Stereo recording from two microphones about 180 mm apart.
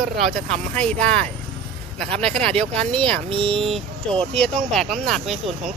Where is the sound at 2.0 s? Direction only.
30° right (ahead or behind).